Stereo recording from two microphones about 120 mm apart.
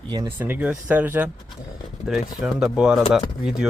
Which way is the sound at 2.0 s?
5° right (ahead or behind).